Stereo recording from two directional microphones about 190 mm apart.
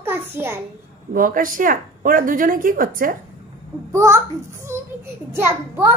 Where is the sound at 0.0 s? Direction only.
10° right (ahead or behind).